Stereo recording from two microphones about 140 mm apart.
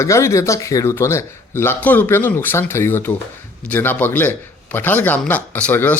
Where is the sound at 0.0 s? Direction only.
20° left (ahead or behind).